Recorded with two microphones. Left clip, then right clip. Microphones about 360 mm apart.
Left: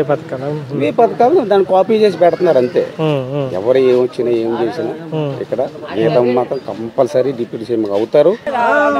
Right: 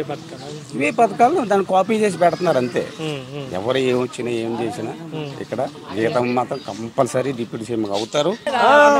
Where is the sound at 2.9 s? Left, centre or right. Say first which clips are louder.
Left 11 dB; left.